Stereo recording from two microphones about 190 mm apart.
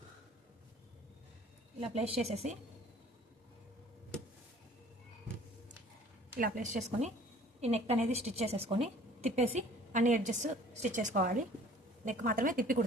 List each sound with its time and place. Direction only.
1.9 s a woman's voice: 35° right (ahead or behind)
6.4 s a woman's voice: 40° right (ahead or behind)